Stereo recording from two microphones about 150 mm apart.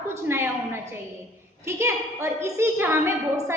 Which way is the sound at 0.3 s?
15° right (ahead or behind).